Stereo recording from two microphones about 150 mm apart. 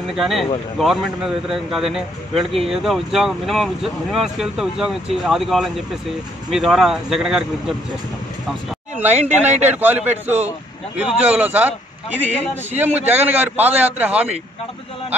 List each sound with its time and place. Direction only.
0.0 s speech: centre (ahead or behind)
9.1 s speech: 45° right (ahead or behind)
9.8 s a man's voice: 10° right (ahead or behind)
12.7 s a man's voice: 10° right (ahead or behind)